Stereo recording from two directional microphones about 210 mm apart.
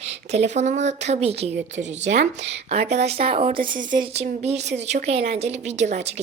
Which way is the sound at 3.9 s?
25° right (ahead or behind).